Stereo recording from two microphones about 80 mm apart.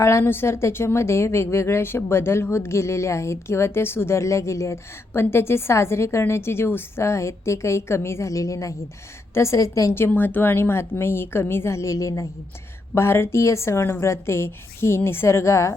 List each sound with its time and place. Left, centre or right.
0.0 s a woman's voice: left
9.9 s a woman's voice: left
12.9 s a woman's voice: left